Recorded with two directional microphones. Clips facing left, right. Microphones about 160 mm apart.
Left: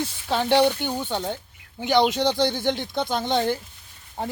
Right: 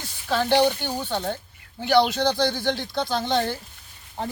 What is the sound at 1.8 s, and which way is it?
Speech, 20° left (ahead or behind).